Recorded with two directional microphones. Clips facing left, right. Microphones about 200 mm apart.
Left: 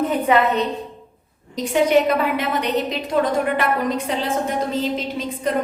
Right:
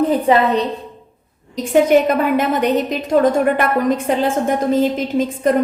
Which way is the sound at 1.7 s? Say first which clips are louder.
Right 4 dB; 50° right (ahead or behind).